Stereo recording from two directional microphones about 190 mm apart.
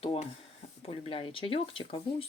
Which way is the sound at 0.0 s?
30° left (ahead or behind).